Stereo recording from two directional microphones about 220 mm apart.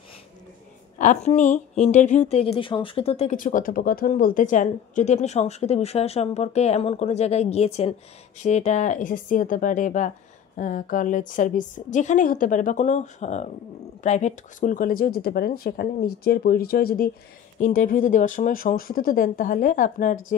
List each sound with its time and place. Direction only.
0.9 s a woman's voice: 35° left (ahead or behind)